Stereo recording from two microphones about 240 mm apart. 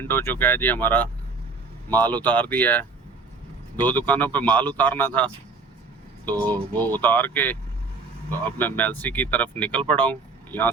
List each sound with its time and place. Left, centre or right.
0.0 s speech: centre
6.4 s speech: centre